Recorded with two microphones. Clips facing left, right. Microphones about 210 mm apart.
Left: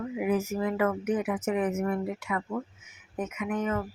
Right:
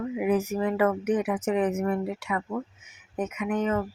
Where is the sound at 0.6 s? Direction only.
35° right (ahead or behind).